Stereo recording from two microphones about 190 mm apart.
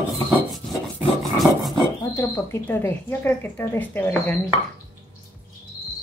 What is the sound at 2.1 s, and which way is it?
Speech, 15° left (ahead or behind).